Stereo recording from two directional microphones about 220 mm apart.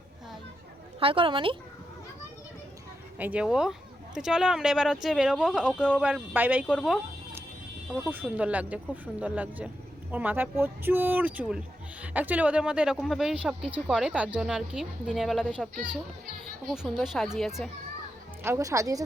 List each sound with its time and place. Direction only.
0.9 s a woman's voice: 25° right (ahead or behind)
3.2 s speech: 5° right (ahead or behind)
18.4 s speech: 15° right (ahead or behind)